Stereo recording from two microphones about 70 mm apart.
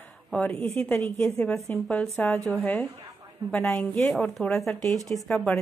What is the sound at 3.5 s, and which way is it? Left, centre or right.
A woman's voice, centre.